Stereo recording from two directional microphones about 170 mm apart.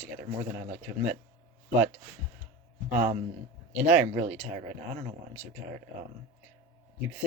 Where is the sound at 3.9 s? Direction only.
45° right (ahead or behind).